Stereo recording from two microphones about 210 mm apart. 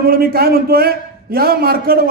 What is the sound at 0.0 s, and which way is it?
A man's voice, 45° right (ahead or behind).